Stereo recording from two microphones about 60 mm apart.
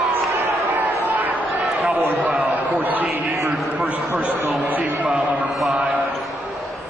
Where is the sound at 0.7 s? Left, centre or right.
Right.